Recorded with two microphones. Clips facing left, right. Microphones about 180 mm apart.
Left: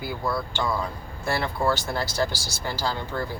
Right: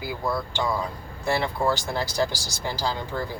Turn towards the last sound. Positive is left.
turn(degrees=-15)  # may be behind; listen again after turning